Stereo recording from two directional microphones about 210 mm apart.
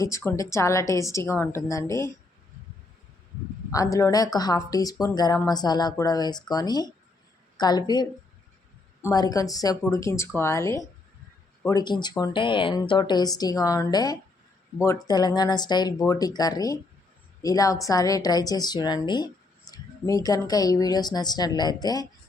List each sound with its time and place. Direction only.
0.0 s a woman's voice: 10° left (ahead or behind)
3.7 s a woman's voice: 15° left (ahead or behind)